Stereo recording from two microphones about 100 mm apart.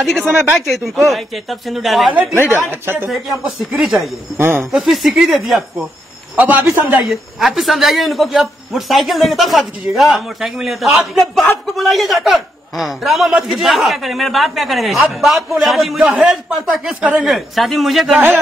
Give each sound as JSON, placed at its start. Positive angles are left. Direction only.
{"t": 0.0, "sound": "a man's voice", "side_deg": 0}
{"t": 0.3, "sound": "speech", "side_deg": -20}
{"t": 0.6, "sound": "a man's voice", "side_deg": 0}
{"t": 2.5, "sound": "speech", "side_deg": -25}
{"t": 3.7, "sound": "a man's voice", "side_deg": 0}
{"t": 4.4, "sound": "speech", "side_deg": -20}
{"t": 4.6, "sound": "a man's voice", "side_deg": 0}
{"t": 6.3, "sound": "speech", "side_deg": -15}
{"t": 7.0, "sound": "a man's voice", "side_deg": 0}